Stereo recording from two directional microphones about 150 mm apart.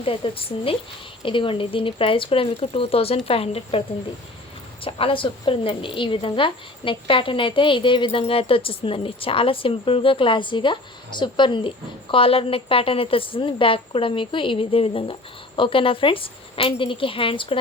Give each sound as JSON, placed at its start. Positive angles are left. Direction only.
{"t": 0.0, "sound": "a woman's voice", "side_deg": 40}